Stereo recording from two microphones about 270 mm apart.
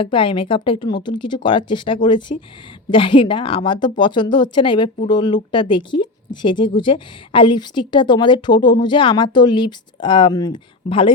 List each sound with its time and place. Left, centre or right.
0.0 s speech: centre